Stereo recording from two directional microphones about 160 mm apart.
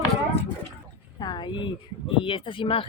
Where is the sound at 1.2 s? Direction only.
30° left (ahead or behind).